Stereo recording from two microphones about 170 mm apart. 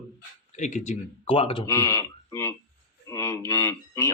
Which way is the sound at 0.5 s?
45° left (ahead or behind).